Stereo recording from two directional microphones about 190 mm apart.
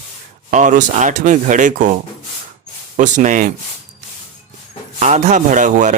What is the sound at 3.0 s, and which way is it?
Speech, 40° right (ahead or behind).